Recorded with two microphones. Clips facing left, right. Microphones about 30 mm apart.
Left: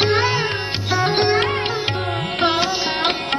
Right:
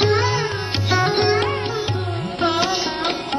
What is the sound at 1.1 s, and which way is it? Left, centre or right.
Music, centre.